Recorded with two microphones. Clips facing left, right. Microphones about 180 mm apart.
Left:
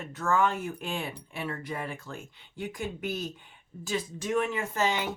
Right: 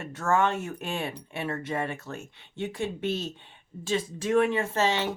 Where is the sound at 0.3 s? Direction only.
25° right (ahead or behind).